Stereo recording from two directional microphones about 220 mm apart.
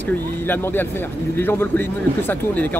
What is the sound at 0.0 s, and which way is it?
Speech, 10° left (ahead or behind).